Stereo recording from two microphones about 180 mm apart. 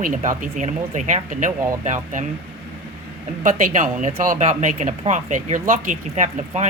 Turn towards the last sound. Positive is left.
turn(degrees=-40)  # may be behind; listen again after turning